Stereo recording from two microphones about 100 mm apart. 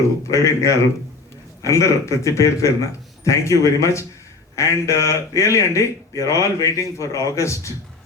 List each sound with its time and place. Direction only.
0.3 s a man's voice: 30° left (ahead or behind)